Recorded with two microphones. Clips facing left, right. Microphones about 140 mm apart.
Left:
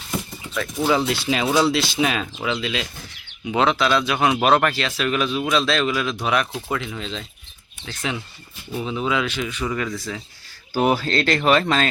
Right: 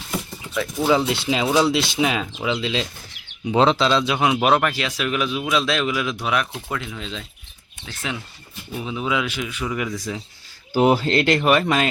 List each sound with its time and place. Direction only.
0.8 s speech: 10° right (ahead or behind)
8.8 s speech: 5° right (ahead or behind)